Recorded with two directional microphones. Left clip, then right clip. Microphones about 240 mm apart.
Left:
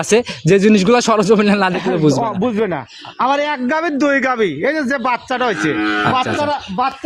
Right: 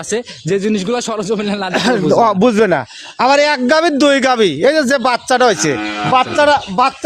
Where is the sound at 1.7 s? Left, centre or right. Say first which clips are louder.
Right 3 dB; right.